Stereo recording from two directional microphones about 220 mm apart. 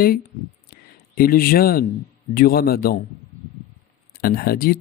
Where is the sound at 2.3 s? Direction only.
40° left (ahead or behind).